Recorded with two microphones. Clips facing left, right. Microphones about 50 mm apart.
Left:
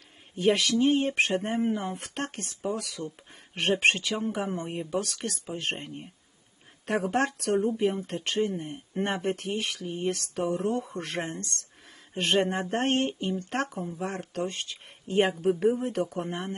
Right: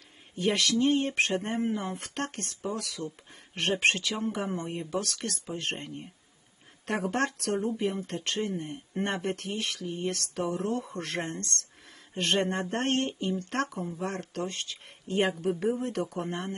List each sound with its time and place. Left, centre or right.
0.8 s speech: centre